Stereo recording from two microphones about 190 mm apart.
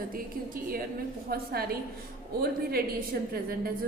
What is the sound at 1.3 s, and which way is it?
A woman's voice, 50° right (ahead or behind).